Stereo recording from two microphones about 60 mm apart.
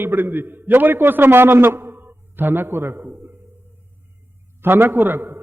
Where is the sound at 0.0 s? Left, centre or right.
Right.